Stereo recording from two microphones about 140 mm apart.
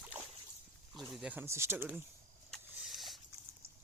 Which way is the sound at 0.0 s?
10° right (ahead or behind).